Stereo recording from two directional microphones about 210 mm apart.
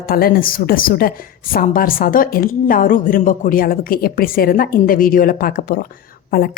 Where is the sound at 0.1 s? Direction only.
45° left (ahead or behind).